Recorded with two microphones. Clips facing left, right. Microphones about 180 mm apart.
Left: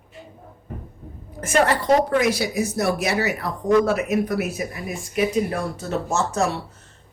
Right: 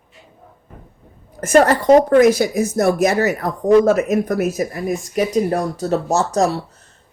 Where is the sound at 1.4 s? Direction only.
45° right (ahead or behind).